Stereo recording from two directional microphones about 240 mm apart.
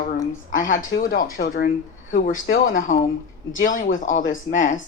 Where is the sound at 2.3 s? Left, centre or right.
Left.